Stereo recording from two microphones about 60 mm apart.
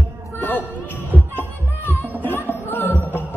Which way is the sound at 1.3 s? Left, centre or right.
Left.